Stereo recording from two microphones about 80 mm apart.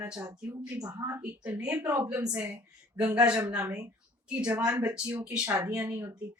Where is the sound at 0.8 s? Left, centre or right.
Right.